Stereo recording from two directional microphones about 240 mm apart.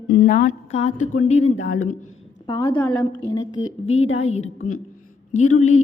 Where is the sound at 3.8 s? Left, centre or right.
Left.